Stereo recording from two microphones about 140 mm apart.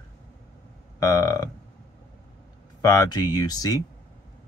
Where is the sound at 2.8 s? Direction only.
25° left (ahead or behind).